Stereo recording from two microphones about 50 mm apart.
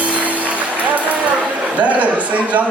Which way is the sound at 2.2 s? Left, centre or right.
Right.